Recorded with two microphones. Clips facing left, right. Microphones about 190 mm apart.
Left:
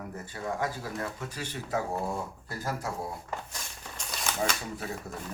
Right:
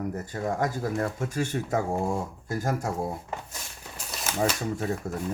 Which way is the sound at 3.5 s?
5° right (ahead or behind).